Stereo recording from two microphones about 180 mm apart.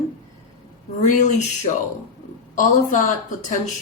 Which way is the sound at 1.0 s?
40° left (ahead or behind).